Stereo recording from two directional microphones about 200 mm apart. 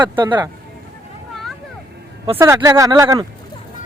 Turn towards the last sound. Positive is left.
turn(degrees=-15)  # may be behind; listen again after turning